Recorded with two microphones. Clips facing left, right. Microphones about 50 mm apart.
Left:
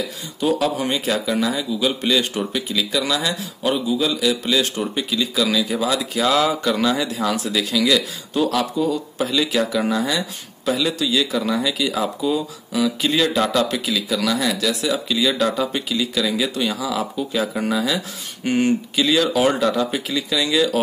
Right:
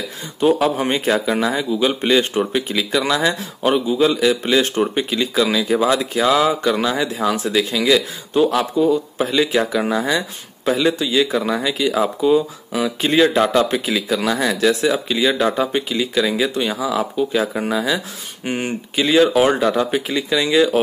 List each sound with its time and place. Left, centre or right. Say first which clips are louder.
0.4 s a man's voice: right 4 dB; right
6.2 s speech: right 2 dB; centre